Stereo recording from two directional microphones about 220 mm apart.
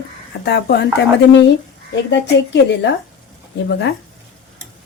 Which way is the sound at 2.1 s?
50° left (ahead or behind).